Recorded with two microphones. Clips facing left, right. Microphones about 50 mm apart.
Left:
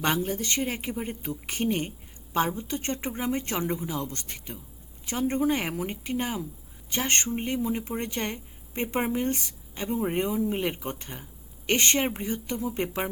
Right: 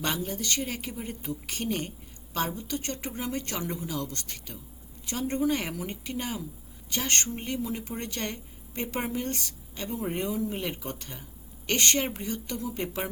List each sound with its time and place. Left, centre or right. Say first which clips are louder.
0.0 s speech: left 4 dB; left